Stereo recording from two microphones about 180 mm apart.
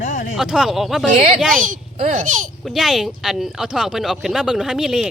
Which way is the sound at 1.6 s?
45° right (ahead or behind).